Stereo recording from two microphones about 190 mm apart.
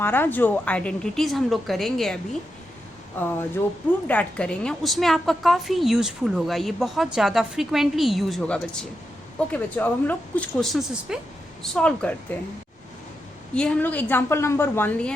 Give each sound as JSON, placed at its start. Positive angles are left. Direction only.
{"t": 0.0, "sound": "a woman's voice", "side_deg": 10}
{"t": 4.0, "sound": "a woman's voice", "side_deg": 5}
{"t": 13.5, "sound": "speech", "side_deg": 5}